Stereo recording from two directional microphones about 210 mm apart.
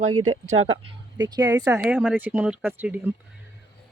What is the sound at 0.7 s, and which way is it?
Speech, 20° right (ahead or behind).